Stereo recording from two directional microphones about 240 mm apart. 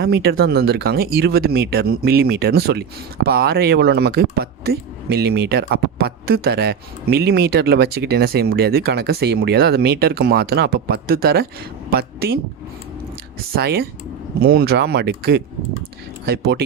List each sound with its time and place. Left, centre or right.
0.0 s speech: right
13.6 s speech: right